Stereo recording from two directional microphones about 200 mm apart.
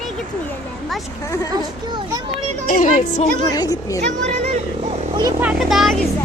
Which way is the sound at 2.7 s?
40° left (ahead or behind).